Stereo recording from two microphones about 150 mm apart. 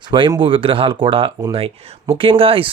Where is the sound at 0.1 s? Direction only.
30° right (ahead or behind).